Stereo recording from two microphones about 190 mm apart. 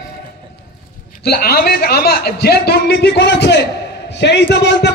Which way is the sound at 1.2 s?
55° left (ahead or behind).